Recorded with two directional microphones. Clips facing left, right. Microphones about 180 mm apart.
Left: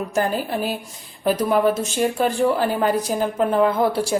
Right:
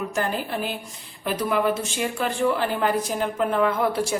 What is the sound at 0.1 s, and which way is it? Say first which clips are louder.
Speech: left 4 dB; 40° left (ahead or behind).